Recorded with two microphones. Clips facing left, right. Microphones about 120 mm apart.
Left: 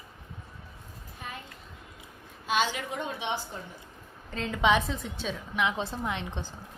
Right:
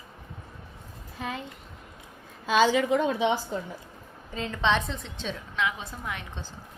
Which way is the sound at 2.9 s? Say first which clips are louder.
Right 11 dB; 90° right.